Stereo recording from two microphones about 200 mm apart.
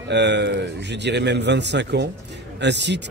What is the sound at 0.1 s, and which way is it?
Speech, 60° right (ahead or behind).